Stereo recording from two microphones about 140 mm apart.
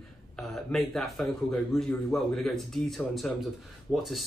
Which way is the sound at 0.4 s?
5° left (ahead or behind).